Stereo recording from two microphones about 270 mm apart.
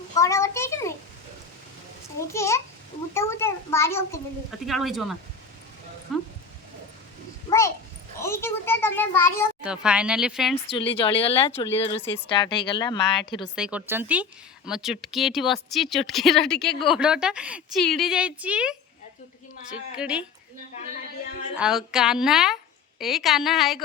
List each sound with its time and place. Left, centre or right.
0.2 s a sound: centre
2.1 s a child's voice: centre
6.1 s a sound: centre
8.2 s a child's voice: centre
9.6 s speech: centre
10.7 s speech: centre
13.6 s speech: centre
20.0 s speech: centre
21.6 s speech: centre